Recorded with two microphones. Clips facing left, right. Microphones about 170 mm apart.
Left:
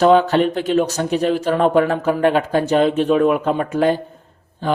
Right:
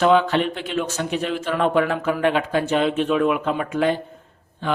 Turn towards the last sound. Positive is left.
turn(degrees=35)  # may be behind; listen again after turning